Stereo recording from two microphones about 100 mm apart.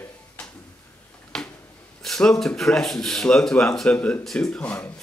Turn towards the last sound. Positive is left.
turn(degrees=5)  # may be behind; listen again after turning